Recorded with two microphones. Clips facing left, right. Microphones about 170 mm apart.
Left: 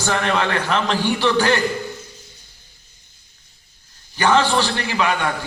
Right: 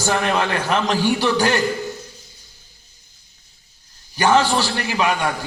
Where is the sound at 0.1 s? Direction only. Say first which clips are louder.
Even; 10° right (ahead or behind).